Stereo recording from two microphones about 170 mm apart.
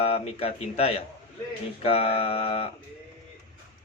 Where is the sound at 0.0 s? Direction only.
35° left (ahead or behind).